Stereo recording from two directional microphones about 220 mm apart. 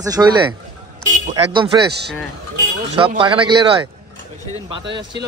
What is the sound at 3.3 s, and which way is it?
Speech, 20° right (ahead or behind).